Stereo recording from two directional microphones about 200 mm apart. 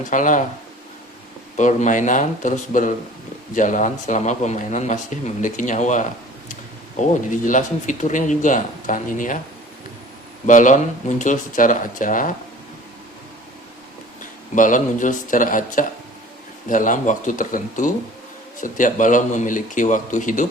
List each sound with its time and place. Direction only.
0.0 s speech: 40° left (ahead or behind)
1.5 s speech: 40° left (ahead or behind)
7.1 s speech: 40° left (ahead or behind)
10.4 s speech: 40° left (ahead or behind)
14.5 s speech: 40° left (ahead or behind)